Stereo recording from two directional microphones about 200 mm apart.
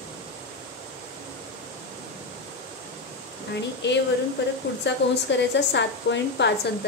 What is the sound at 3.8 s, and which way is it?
A woman's voice, 60° left (ahead or behind).